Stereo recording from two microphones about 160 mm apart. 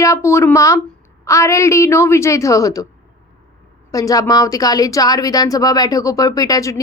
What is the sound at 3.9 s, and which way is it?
Speech, 20° left (ahead or behind).